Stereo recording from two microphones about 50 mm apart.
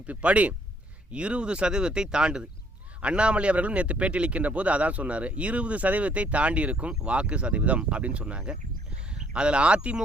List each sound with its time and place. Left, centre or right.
0.1 s speech: right